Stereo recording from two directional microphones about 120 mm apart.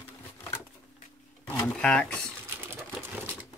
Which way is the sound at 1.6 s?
10° left (ahead or behind).